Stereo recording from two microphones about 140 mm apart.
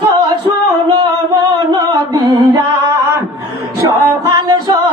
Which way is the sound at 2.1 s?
35° right (ahead or behind).